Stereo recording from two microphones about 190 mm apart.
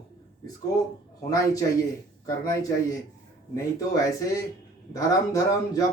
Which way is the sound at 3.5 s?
15° left (ahead or behind).